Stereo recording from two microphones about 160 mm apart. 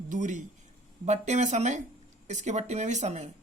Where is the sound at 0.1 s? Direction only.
50° right (ahead or behind).